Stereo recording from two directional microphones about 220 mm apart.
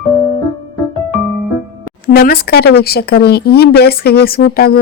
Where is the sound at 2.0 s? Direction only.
40° left (ahead or behind).